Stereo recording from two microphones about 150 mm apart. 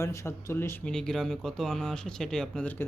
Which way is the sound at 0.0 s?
20° left (ahead or behind).